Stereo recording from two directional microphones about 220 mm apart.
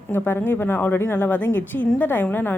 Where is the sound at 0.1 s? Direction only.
10° left (ahead or behind).